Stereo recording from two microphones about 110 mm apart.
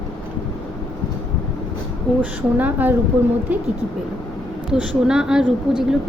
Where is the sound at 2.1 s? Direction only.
5° left (ahead or behind).